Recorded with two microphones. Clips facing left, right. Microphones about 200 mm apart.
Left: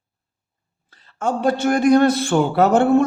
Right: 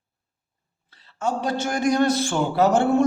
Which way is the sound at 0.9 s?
50° left (ahead or behind).